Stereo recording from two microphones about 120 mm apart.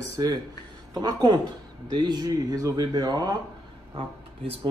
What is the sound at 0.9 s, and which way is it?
Speech, 35° right (ahead or behind).